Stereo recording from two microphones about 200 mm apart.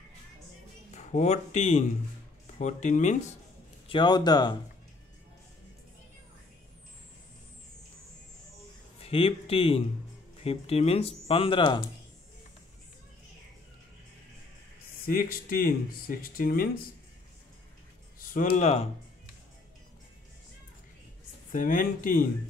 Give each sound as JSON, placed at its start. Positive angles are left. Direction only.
{"t": 0.9, "sound": "speech", "side_deg": 35}
{"t": 3.8, "sound": "speech", "side_deg": 25}
{"t": 9.0, "sound": "speech", "side_deg": 30}
{"t": 15.0, "sound": "speech", "side_deg": 45}
{"t": 18.2, "sound": "speech", "side_deg": 45}
{"t": 21.5, "sound": "speech", "side_deg": 40}